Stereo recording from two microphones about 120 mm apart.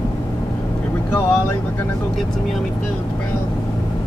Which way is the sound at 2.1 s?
Centre (ahead or behind).